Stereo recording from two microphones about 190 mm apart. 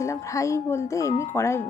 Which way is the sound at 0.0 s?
15° left (ahead or behind).